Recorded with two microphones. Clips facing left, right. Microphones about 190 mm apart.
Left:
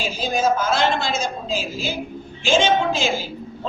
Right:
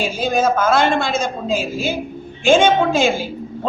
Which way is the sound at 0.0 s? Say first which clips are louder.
Right 4 dB; 55° right (ahead or behind).